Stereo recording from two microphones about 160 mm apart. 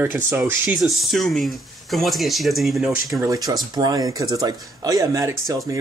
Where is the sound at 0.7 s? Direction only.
Centre (ahead or behind).